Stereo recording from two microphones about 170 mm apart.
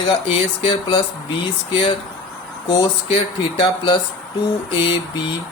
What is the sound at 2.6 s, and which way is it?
Speech, 30° left (ahead or behind).